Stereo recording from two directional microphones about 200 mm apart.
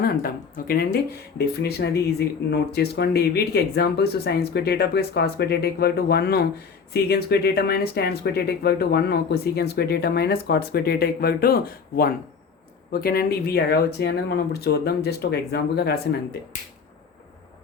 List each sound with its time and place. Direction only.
0.0 s speech: 50° left (ahead or behind)